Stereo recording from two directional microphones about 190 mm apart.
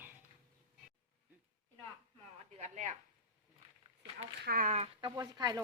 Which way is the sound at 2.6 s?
40° right (ahead or behind).